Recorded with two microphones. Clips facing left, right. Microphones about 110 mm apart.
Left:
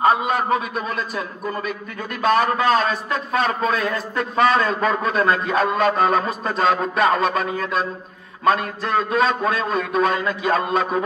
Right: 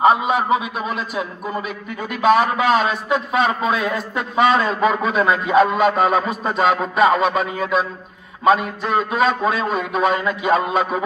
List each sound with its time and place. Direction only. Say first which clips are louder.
0.0 s a man's voice: right 2 dB; 5° right (ahead or behind)